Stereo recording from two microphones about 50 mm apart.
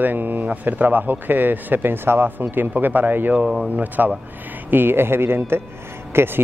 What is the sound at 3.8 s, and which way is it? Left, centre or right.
Speech, right.